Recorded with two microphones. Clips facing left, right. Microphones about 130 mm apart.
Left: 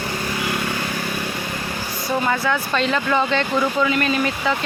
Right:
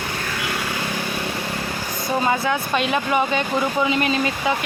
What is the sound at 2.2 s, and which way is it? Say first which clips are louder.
Speech: right 1 dB; 25° right (ahead or behind).